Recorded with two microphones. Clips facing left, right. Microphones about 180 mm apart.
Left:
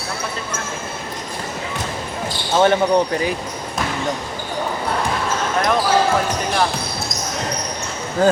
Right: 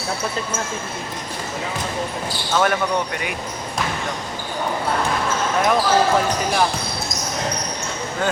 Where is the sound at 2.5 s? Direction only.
25° left (ahead or behind).